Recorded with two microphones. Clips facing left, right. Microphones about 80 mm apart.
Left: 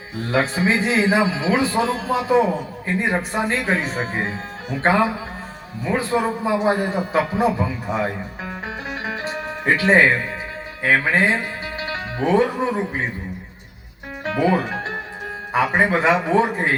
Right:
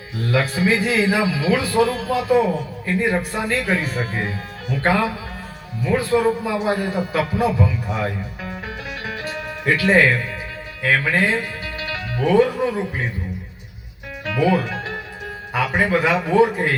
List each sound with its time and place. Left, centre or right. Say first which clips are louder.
0.2 s a man's voice: even; left
9.0 s music: left 1 dB; left
10.8 s speech: left 1 dB; left
14.3 s music: even; left
15.5 s a man's voice: left 1 dB; left